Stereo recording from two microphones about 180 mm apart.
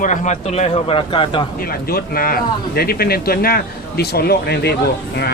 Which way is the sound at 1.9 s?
55° left (ahead or behind).